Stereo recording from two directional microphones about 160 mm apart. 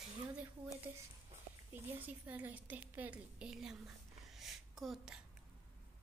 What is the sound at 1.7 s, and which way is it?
A woman's voice, 10° right (ahead or behind).